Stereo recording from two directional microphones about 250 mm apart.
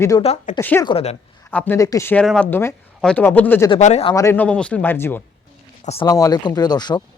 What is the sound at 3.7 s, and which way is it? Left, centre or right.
Speech, left.